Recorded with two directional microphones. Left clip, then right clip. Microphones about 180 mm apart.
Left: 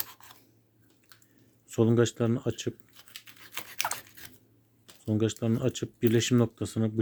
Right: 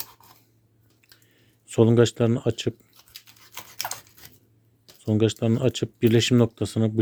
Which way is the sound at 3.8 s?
5° right (ahead or behind).